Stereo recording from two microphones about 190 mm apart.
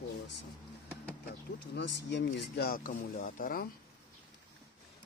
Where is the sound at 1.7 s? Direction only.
65° left (ahead or behind); by 3.7 s 50° left (ahead or behind).